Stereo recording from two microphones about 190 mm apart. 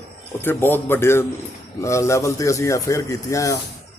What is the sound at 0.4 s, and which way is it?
A man's voice, 10° left (ahead or behind).